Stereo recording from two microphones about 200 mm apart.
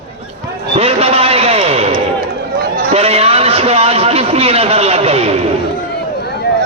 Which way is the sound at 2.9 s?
30° right (ahead or behind).